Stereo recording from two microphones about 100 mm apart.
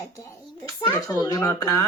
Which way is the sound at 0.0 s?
30° left (ahead or behind).